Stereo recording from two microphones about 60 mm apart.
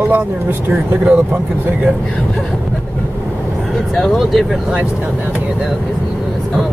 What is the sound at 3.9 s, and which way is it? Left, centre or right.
Speech, centre.